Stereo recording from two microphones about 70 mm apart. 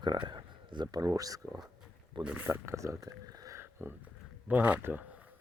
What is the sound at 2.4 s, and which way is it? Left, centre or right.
Speech, right.